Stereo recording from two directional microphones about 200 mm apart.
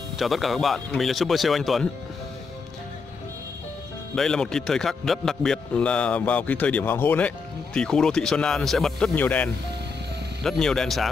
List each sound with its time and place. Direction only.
0.2 s speech: centre (ahead or behind)
4.1 s speech: 5° left (ahead or behind)